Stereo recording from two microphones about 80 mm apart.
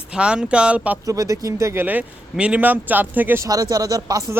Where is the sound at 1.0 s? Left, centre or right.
Right.